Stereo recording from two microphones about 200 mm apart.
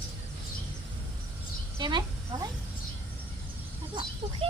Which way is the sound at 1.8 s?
20° right (ahead or behind).